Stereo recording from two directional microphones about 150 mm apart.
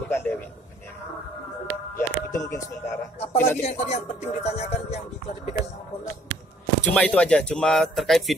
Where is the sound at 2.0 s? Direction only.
20° left (ahead or behind).